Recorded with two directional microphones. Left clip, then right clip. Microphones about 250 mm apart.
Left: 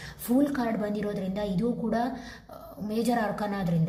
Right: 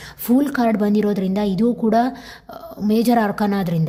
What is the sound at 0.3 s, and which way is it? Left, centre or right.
A woman's voice, right.